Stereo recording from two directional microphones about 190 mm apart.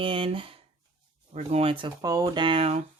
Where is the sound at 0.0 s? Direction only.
30° right (ahead or behind).